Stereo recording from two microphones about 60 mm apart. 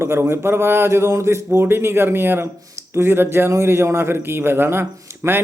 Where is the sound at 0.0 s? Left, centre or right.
Right.